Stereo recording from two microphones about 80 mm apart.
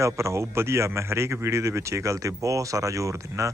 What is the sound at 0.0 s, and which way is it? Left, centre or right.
Speech, right.